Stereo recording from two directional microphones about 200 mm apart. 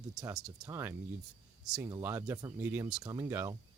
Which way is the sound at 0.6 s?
10° right (ahead or behind).